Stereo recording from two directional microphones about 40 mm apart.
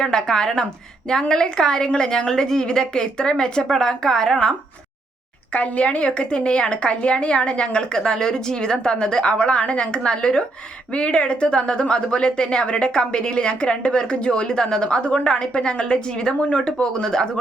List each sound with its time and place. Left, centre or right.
0.0 s a woman's voice: centre
5.5 s a woman's voice: left; by 17.2 s centre